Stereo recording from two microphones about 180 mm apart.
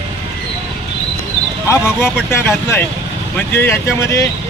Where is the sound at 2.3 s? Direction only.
15° left (ahead or behind).